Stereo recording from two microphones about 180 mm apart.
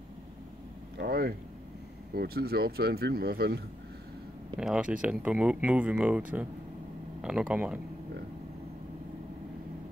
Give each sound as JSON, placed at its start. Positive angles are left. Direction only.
{"t": 0.9, "sound": "speech", "side_deg": -60}
{"t": 4.6, "sound": "speech", "side_deg": -5}